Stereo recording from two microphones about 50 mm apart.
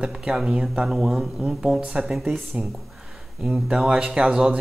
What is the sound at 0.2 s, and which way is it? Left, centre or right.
Speech, centre.